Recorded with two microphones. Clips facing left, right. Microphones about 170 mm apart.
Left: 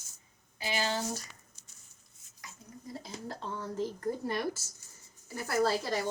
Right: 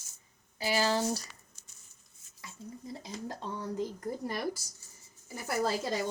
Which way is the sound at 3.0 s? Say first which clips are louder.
Right 1 dB; 15° right (ahead or behind).